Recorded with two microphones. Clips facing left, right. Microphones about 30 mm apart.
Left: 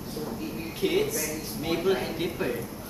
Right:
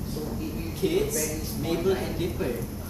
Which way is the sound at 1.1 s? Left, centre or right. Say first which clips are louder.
Right 2 dB; centre.